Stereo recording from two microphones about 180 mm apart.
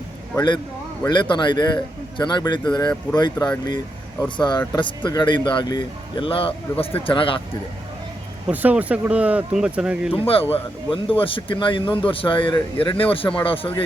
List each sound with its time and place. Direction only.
0.3 s speech: 25° left (ahead or behind)
8.4 s speech: 10° right (ahead or behind)
10.5 s speech: 30° left (ahead or behind)